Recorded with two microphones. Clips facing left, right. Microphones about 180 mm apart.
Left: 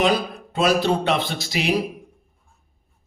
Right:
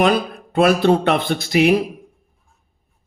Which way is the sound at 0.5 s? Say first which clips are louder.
Right 5 dB; 55° right (ahead or behind).